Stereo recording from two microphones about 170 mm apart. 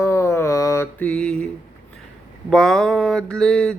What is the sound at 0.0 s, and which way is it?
Mantra, 15° left (ahead or behind).